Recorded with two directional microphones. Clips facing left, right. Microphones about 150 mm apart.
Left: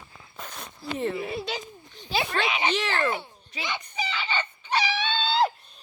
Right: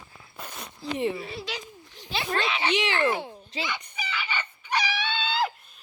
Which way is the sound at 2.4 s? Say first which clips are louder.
Left 1 dB; 10° left (ahead or behind).